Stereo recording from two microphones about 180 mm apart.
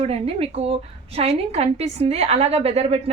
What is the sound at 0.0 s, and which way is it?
A woman's voice, 35° right (ahead or behind).